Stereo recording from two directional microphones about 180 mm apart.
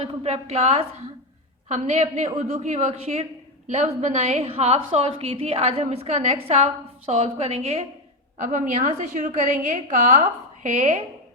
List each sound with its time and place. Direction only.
0.0 s a woman's voice: 35° right (ahead or behind)